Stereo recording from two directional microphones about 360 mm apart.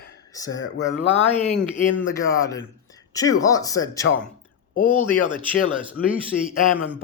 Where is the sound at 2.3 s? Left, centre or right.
Centre.